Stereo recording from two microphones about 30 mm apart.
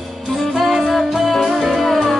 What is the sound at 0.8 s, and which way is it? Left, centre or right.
Music, centre.